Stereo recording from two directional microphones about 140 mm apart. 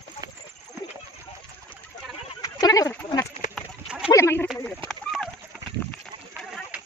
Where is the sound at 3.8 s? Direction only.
10° right (ahead or behind).